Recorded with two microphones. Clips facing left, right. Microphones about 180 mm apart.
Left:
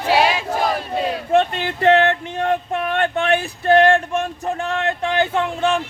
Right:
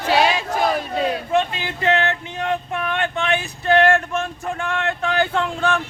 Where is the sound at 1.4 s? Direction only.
55° left (ahead or behind).